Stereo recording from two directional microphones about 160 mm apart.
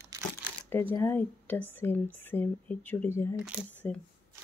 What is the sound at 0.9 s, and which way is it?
Speech, 10° left (ahead or behind).